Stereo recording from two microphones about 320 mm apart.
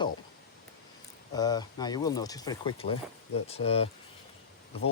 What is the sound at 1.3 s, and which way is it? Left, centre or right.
Speech, centre.